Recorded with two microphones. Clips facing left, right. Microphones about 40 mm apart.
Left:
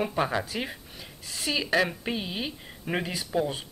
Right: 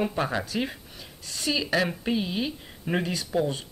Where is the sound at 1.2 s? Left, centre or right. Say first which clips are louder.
Right 2 dB; centre.